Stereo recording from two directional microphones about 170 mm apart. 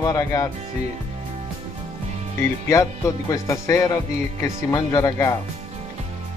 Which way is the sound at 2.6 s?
20° left (ahead or behind).